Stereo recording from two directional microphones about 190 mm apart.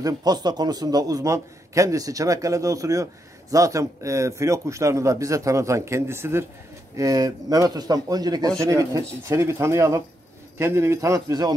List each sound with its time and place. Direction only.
0.0 s a man's voice: 20° right (ahead or behind)